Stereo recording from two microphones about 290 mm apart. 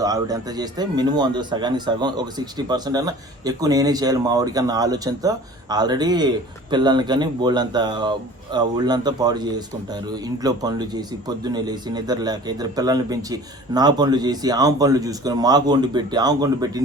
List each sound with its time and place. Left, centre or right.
0.0 s speech: centre